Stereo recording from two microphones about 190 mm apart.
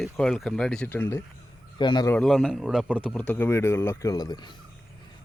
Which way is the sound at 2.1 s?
5° left (ahead or behind).